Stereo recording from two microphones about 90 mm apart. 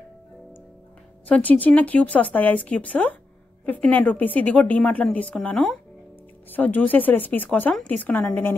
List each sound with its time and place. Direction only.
1.2 s a woman's voice: 15° left (ahead or behind)